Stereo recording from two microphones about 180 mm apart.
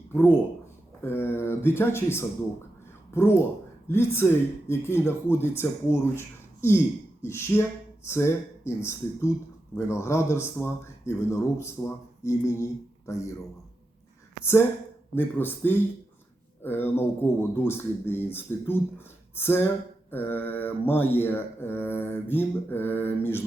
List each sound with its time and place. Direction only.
0.1 s speech: 10° left (ahead or behind)
15.1 s speech: 10° left (ahead or behind)